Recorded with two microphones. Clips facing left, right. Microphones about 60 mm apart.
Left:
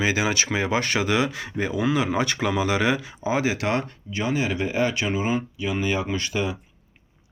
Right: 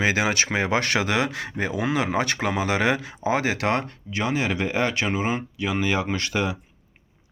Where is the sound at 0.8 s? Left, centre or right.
Right.